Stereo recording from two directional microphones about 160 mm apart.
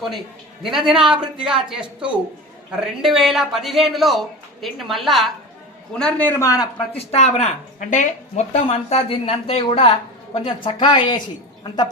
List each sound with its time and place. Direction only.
0.6 s a man's voice: centre (ahead or behind); by 6.7 s 20° left (ahead or behind)
6.7 s speech: 40° left (ahead or behind)
8.6 s speech: 35° left (ahead or behind)